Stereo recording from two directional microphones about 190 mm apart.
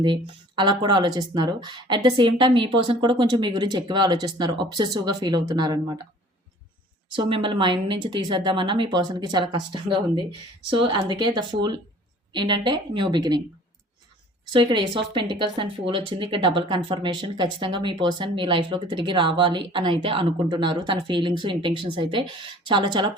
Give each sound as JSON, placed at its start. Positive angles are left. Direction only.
{"t": 0.0, "sound": "speech", "side_deg": -25}
{"t": 7.2, "sound": "speech", "side_deg": -25}
{"t": 14.5, "sound": "speech", "side_deg": -25}